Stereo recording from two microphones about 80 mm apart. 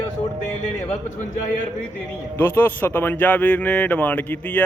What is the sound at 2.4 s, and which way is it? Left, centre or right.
Speech, left.